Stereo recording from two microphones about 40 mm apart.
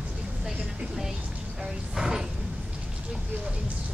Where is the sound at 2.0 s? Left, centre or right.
Centre.